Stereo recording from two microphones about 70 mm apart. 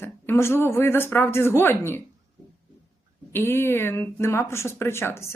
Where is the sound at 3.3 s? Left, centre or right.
Left.